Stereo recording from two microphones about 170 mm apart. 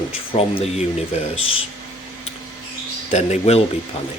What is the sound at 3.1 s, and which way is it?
Speech, 40° left (ahead or behind).